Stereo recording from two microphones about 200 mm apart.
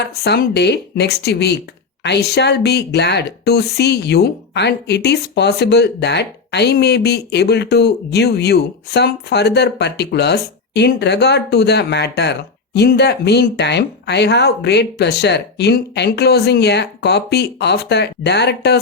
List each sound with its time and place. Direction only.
0.1 s speech: 55° left (ahead or behind)